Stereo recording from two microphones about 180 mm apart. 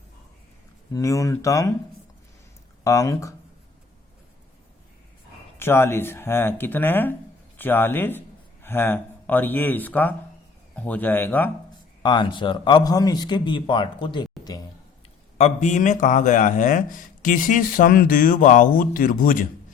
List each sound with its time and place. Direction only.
0.9 s speech: 15° left (ahead or behind)
2.8 s speech: 15° left (ahead or behind)
5.5 s speech: 15° left (ahead or behind)
12.0 s speech: 25° left (ahead or behind)
15.4 s speech: 40° left (ahead or behind)